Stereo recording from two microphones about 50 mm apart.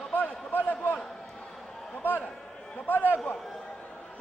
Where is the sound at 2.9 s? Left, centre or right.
Left.